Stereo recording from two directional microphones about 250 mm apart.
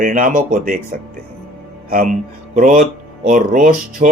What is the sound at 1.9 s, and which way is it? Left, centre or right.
Speech, right.